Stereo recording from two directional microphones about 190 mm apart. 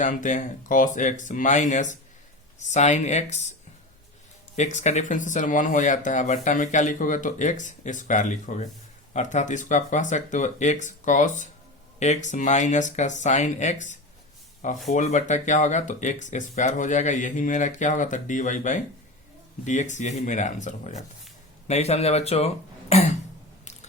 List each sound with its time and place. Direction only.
0.0 s speech: 40° left (ahead or behind)
4.5 s speech: 40° left (ahead or behind)